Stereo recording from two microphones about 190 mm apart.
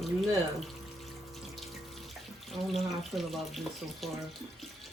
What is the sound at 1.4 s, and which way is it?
Water, centre (ahead or behind).